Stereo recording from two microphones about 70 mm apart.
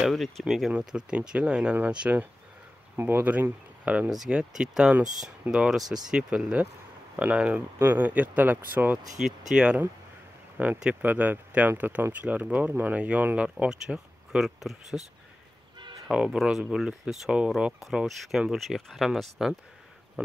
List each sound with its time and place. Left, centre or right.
0.0 s speech: centre
3.0 s speech: right
9.2 s speech: centre
10.6 s speech: right
13.7 s speech: centre
16.1 s speech: centre